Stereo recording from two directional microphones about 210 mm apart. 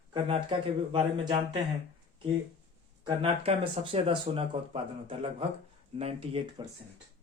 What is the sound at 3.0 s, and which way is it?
Speech, 25° right (ahead or behind).